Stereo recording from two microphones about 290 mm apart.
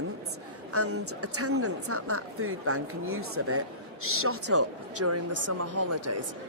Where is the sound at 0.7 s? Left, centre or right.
Right.